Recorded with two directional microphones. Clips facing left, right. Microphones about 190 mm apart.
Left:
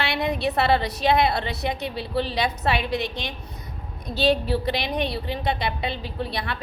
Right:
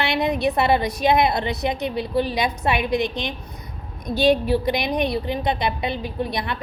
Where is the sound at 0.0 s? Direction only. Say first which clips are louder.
Right 3 dB; 20° right (ahead or behind).